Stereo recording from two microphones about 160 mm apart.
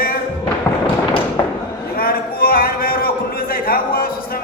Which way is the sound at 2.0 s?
65° left (ahead or behind).